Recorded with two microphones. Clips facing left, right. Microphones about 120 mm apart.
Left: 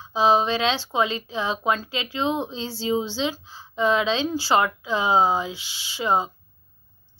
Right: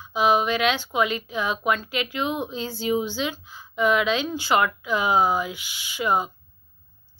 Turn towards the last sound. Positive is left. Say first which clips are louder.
# left 1 dB
turn(degrees=25)  # may be behind; listen again after turning